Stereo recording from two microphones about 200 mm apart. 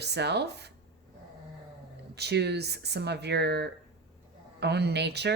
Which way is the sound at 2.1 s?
55° right (ahead or behind).